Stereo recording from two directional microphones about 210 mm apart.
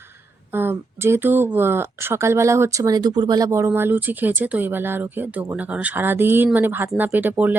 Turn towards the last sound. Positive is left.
turn(degrees=-10)  # may be behind; listen again after turning